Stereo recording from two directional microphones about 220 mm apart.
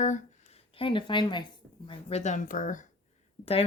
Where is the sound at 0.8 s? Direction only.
20° left (ahead or behind).